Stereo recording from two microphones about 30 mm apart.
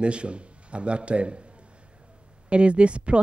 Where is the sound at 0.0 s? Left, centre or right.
Right.